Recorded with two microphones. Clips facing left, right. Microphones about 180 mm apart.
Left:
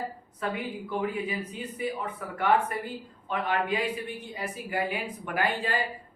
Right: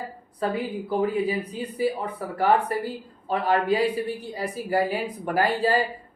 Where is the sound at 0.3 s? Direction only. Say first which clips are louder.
Right 6 dB; 35° right (ahead or behind).